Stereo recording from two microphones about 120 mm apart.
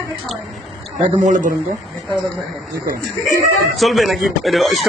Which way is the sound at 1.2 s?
90° right.